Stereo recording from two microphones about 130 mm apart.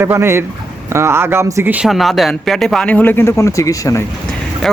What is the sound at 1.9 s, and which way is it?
Speech, centre (ahead or behind).